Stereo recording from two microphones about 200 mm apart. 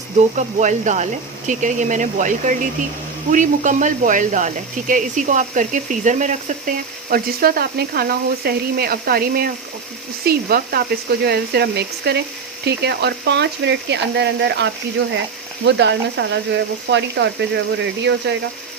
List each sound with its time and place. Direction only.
0.3 s speech: 35° right (ahead or behind); by 18.3 s 60° right (ahead or behind)